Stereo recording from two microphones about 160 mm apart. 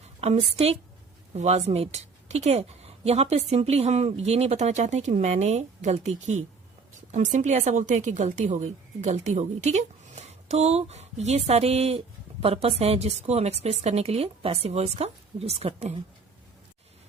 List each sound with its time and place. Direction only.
0.2 s a woman's voice: 40° right (ahead or behind)